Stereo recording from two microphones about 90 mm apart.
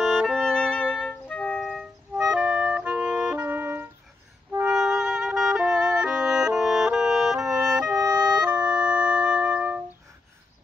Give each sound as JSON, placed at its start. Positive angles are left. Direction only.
{"t": 0.0, "sound": "music", "side_deg": 0}
{"t": 0.5, "sound": "music", "side_deg": 10}
{"t": 1.6, "sound": "music", "side_deg": 0}
{"t": 2.1, "sound": "clarinet", "side_deg": -10}
{"t": 3.4, "sound": "music", "side_deg": -25}
{"t": 4.6, "sound": "music", "side_deg": -5}
{"t": 7.9, "sound": "music", "side_deg": -45}
{"t": 8.4, "sound": "music", "side_deg": -15}